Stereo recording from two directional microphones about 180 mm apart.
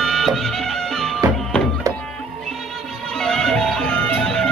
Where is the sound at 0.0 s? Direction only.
Centre (ahead or behind).